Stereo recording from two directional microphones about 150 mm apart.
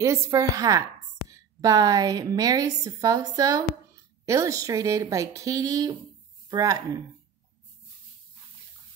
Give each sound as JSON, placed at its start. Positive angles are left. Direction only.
{"t": 0.0, "sound": "a woman's voice", "side_deg": -20}